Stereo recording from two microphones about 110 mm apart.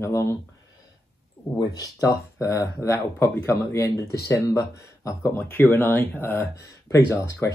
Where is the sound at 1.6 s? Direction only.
30° left (ahead or behind).